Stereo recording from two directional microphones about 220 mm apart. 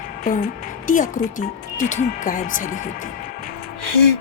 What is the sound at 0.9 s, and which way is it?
A woman's voice, 35° left (ahead or behind).